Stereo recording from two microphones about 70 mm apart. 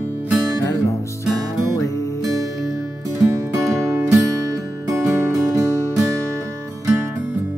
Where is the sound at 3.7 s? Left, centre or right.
Right.